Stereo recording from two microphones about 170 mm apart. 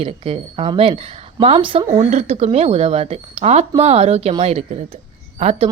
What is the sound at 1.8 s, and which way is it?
Speech, 40° right (ahead or behind).